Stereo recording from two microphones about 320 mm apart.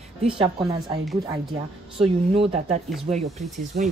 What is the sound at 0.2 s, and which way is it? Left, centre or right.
Speech, centre.